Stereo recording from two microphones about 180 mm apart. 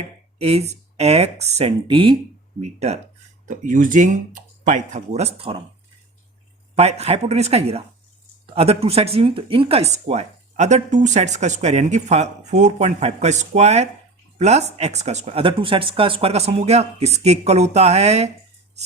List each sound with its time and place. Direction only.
0.3 s speech: 35° right (ahead or behind)
6.7 s speech: 35° right (ahead or behind)